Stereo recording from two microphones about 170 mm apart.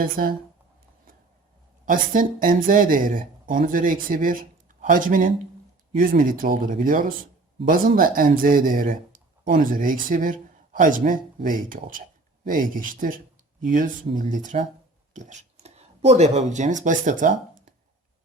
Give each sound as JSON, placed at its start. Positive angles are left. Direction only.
{"t": 0.0, "sound": "speech", "side_deg": -60}
{"t": 1.8, "sound": "speech", "side_deg": -55}